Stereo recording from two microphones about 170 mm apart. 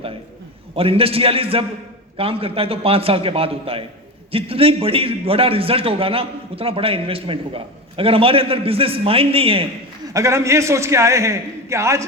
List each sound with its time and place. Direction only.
0.8 s a man's voice: 35° right (ahead or behind)
10.1 s a man's voice: 20° right (ahead or behind)